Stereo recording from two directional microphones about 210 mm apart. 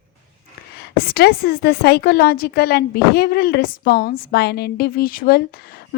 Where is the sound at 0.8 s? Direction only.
45° left (ahead or behind).